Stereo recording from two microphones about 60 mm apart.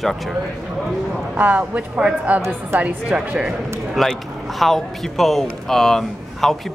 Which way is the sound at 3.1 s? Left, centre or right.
Centre.